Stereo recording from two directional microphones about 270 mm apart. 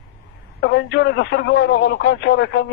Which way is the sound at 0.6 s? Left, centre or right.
Left.